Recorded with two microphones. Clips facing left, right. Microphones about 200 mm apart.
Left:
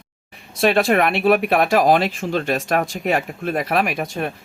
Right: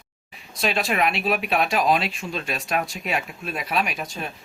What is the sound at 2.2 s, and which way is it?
Speech, 65° left (ahead or behind).